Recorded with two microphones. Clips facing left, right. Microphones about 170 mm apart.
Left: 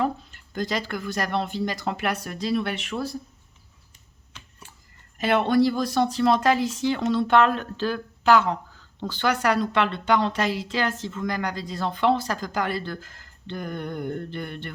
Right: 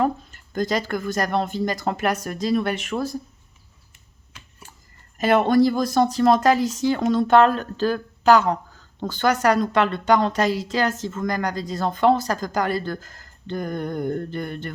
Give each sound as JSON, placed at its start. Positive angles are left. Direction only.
{"t": 0.0, "sound": "speech", "side_deg": -45}
{"t": 4.6, "sound": "a sound", "side_deg": -45}
{"t": 5.1, "sound": "speech", "side_deg": -45}